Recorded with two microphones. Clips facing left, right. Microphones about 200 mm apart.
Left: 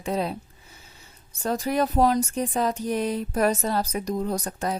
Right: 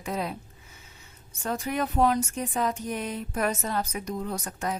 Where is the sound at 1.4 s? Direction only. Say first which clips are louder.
Left 5 dB; 35° left (ahead or behind).